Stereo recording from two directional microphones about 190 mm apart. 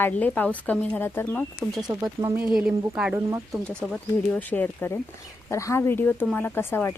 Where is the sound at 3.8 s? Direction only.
5° left (ahead or behind).